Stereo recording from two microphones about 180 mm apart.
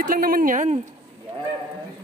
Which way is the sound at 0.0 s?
50° right (ahead or behind).